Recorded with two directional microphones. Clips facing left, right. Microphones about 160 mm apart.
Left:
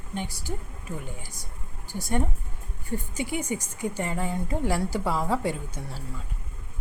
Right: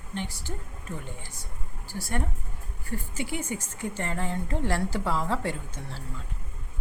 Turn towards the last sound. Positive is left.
turn(degrees=10)  # may be behind; listen again after turning